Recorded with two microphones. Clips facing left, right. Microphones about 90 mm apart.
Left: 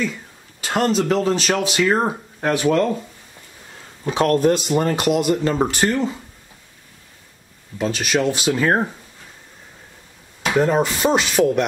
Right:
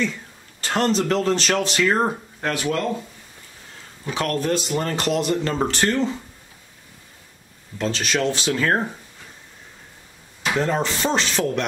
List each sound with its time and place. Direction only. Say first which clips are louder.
0.0 s speech: even; 5° left (ahead or behind)
2.5 s speech: left 7 dB; 25° left (ahead or behind)
4.1 s speech: left 6 dB; 25° left (ahead or behind)
7.8 s speech: left 3 dB; 10° left (ahead or behind)
10.5 s speech: left 5 dB; 10° left (ahead or behind)